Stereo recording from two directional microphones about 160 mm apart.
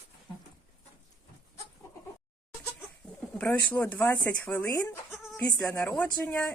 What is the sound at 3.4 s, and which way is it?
Speech, 10° left (ahead or behind).